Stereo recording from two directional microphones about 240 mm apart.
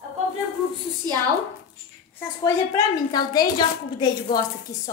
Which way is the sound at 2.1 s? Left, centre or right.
Centre.